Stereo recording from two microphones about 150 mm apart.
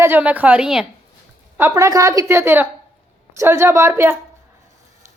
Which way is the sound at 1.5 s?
20° right (ahead or behind).